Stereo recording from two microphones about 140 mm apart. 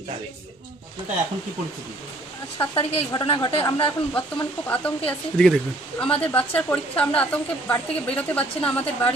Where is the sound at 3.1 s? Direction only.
35° left (ahead or behind).